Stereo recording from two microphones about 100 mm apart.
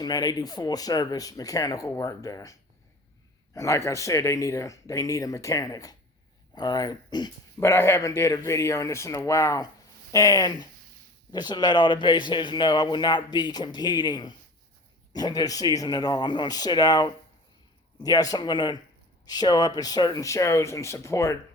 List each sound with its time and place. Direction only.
0.0 s speech: 40° left (ahead or behind)
7.6 s speech: 25° left (ahead or behind)